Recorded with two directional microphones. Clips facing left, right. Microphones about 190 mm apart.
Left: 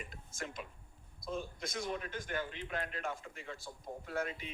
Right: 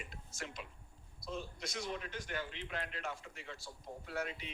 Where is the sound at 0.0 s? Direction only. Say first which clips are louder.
Left 3 dB; 50° left (ahead or behind).